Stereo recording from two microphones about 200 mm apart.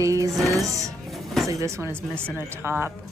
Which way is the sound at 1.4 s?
15° right (ahead or behind).